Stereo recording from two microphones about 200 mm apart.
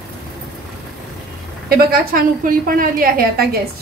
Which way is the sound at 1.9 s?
45° right (ahead or behind).